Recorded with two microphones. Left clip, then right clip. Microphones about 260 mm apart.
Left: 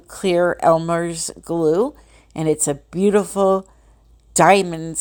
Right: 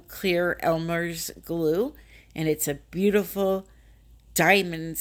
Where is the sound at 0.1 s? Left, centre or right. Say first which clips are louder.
Left 7 dB; centre.